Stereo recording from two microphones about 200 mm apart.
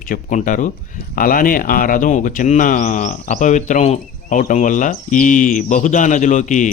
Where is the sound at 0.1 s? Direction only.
40° left (ahead or behind).